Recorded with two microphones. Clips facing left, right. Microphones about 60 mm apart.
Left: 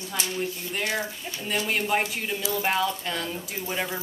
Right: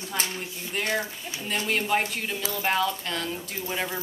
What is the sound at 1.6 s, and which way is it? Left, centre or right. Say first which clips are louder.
A woman's voice: right 1 dB; centre.